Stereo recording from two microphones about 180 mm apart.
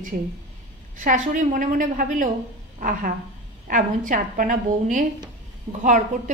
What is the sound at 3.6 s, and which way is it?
A woman's voice, 50° right (ahead or behind).